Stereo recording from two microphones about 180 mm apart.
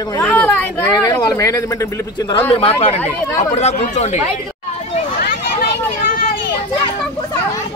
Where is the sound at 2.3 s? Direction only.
35° left (ahead or behind).